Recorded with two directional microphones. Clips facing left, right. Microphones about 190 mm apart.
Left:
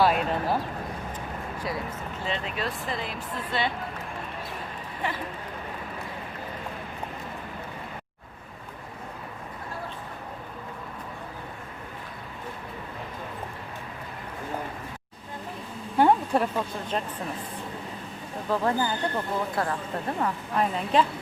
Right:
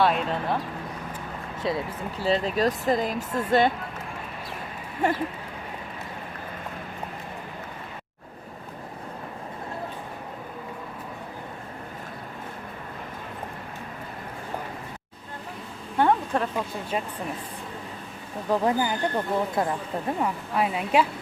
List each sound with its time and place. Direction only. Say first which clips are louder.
0.0 s speech: even; 5° left (ahead or behind)
1.6 s speech: right 6 dB; 30° right (ahead or behind); by 3.7 s 45° right (ahead or behind)
16.0 s a sound: left 1 dB; 10° left (ahead or behind)
16.9 s speech: right 1 dB; 5° right (ahead or behind)
18.4 s speech: right 2 dB; 15° right (ahead or behind)